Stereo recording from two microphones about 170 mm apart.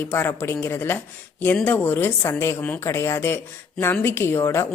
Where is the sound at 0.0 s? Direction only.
10° left (ahead or behind).